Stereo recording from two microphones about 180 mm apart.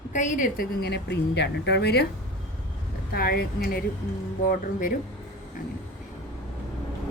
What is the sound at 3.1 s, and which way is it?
A woman's voice, 55° left (ahead or behind).